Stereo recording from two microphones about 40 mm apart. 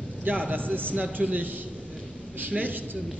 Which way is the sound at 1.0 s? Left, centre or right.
Right.